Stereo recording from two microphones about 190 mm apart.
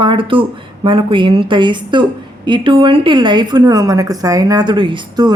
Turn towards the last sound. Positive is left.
turn(degrees=-20)  # may be behind; listen again after turning